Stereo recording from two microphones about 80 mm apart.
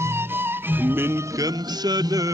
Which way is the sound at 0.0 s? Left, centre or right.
Right.